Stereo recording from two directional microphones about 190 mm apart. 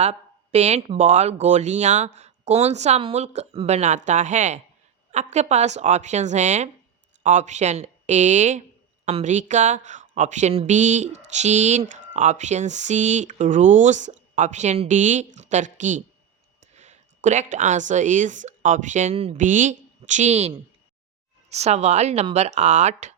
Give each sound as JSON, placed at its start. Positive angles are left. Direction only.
{"t": 0.0, "sound": "a woman's voice", "side_deg": -35}